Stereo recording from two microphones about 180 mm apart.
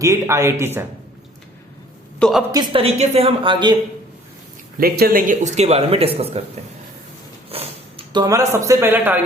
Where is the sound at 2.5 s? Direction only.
25° right (ahead or behind).